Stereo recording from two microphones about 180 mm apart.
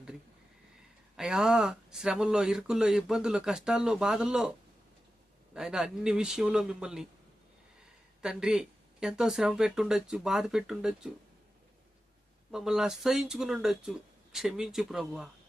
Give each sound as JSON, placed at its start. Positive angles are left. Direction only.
{"t": 1.1, "sound": "speech", "side_deg": -5}
{"t": 5.5, "sound": "speech", "side_deg": -5}
{"t": 8.2, "sound": "speech", "side_deg": -5}
{"t": 12.5, "sound": "speech", "side_deg": -5}